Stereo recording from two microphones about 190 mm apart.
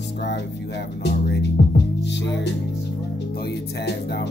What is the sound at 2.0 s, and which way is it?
Music, 70° left (ahead or behind).